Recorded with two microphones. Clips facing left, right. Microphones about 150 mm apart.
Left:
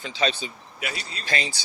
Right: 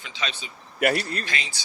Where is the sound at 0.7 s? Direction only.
55° right (ahead or behind).